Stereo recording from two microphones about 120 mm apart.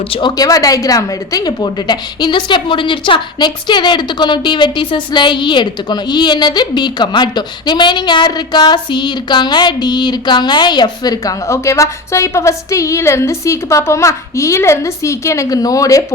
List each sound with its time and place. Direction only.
0.1 s a woman's voice: 40° left (ahead or behind)